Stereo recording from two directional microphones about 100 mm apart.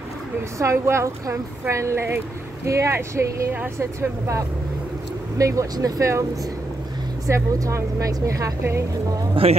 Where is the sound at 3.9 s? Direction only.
30° right (ahead or behind).